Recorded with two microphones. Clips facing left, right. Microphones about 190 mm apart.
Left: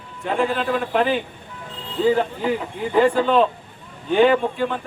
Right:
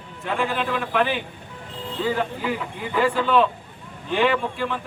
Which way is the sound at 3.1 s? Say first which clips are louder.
Left 2 dB; 35° left (ahead or behind).